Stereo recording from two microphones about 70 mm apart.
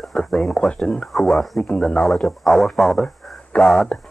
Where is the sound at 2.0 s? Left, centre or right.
Centre.